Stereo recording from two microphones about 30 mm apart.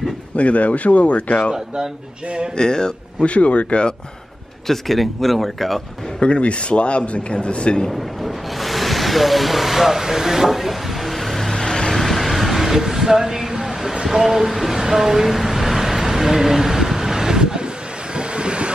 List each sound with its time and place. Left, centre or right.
0.4 s speech: left
2.5 s speech: left
3.3 s speech: left
4.6 s speech: centre
6.2 s a man's voice: left
7.9 s vehicle: centre
11.5 s vehicle: left
12.0 s vehicle: centre
14.0 s a sound: centre
18.1 s train: right